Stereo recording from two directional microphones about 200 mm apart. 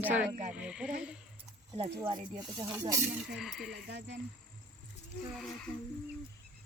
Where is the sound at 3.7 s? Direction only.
60° right (ahead or behind).